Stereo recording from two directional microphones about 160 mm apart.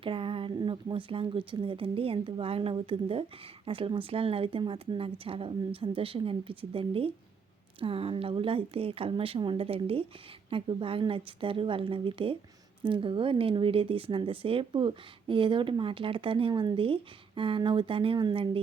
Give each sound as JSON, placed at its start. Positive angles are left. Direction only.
{"t": 0.0, "sound": "speech", "side_deg": -35}